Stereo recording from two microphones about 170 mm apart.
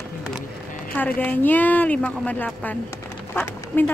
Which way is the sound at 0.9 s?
10° left (ahead or behind).